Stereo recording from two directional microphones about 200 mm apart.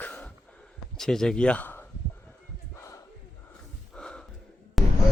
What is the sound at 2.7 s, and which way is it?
Battle cry, 15° left (ahead or behind).